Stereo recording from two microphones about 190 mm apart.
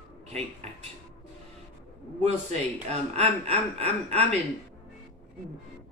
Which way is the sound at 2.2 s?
35° right (ahead or behind).